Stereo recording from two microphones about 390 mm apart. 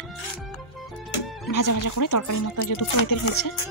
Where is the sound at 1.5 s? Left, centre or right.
Left.